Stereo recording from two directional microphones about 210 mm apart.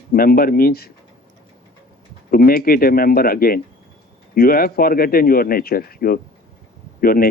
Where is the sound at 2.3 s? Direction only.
45° left (ahead or behind).